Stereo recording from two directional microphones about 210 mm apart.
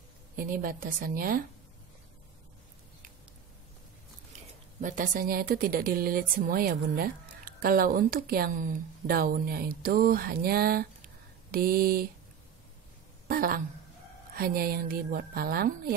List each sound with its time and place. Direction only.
0.4 s speech: 45° right (ahead or behind)
4.8 s speech: 40° right (ahead or behind)
13.3 s a sound: 45° right (ahead or behind)
14.3 s speech: 45° right (ahead or behind)